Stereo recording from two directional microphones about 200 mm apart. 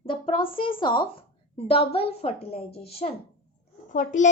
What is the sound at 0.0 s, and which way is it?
A child's voice, 25° left (ahead or behind).